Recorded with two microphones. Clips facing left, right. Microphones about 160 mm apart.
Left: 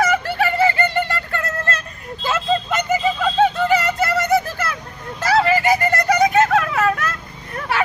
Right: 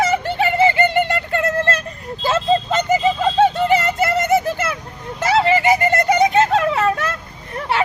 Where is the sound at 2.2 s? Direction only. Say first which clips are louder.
Right 3 dB; 30° right (ahead or behind).